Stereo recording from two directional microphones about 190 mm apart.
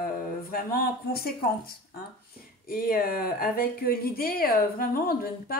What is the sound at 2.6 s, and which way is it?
Speech, 50° left (ahead or behind).